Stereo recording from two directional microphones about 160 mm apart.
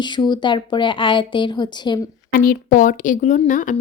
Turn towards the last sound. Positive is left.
turn(degrees=50)  # may be behind; listen again after turning